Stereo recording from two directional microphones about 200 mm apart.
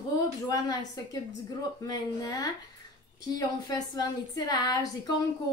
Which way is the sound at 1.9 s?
20° left (ahead or behind).